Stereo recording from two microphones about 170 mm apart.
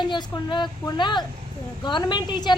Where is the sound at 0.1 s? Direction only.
25° left (ahead or behind).